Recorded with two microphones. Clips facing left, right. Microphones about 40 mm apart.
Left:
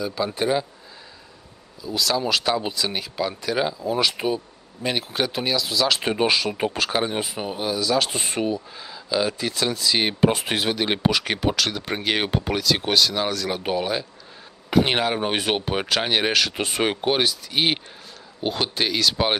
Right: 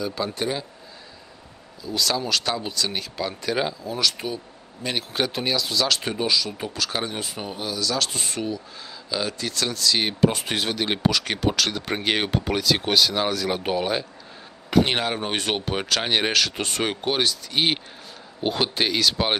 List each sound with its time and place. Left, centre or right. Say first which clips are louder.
0.0 s speech: left 2 dB; centre
1.8 s speech: left 1 dB; centre
3.8 s speech: left 4 dB; centre
4.8 s speech: left 1 dB; centre
5.9 s speech: left 4 dB; left
6.2 s speech: left 5 dB; left
6.9 s speech: left 4 dB; centre
8.8 s speech: left 4 dB; centre
11.3 s speech: even; centre